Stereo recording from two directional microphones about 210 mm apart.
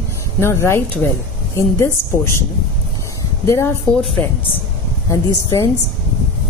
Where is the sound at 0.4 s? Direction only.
10° left (ahead or behind).